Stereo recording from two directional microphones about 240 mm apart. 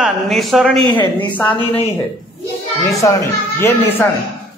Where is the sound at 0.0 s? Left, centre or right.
Centre.